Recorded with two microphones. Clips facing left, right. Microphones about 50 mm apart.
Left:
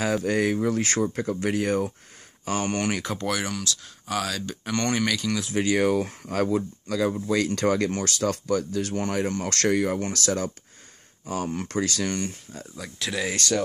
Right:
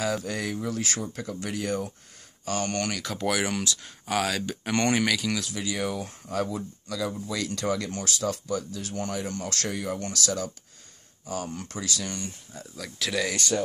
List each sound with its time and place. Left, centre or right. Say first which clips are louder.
0.0 s speech: left 6 dB; left
3.2 s speech: right 1 dB; centre
3.4 s speech: right 1 dB; centre
3.8 s speech: right 2 dB; centre
5.0 s speech: left 1 dB; centre
5.5 s speech: left 8 dB; left
9.5 s speech: left 10 dB; left
10.1 s speech: left 3 dB; left
13.0 s speech: right 1 dB; centre